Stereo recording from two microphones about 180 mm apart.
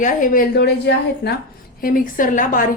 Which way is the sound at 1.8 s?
50° left (ahead or behind).